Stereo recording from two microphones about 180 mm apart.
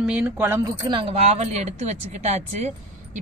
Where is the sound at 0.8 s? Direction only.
25° right (ahead or behind).